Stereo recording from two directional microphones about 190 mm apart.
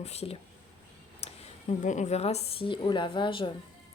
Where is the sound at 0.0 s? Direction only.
35° left (ahead or behind).